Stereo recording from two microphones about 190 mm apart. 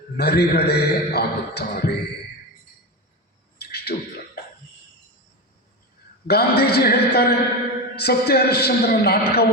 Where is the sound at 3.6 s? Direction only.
55° left (ahead or behind).